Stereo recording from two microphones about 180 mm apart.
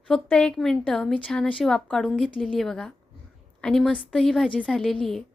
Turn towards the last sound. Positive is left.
turn(degrees=0)  # may be behind; listen again after turning